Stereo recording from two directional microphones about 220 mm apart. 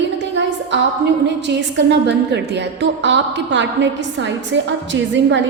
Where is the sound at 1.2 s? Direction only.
50° right (ahead or behind).